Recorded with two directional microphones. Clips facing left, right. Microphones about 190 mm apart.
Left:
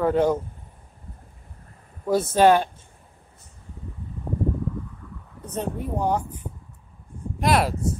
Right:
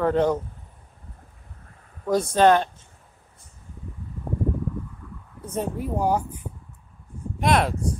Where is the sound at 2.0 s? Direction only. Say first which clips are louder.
Left 1 dB; 5° left (ahead or behind).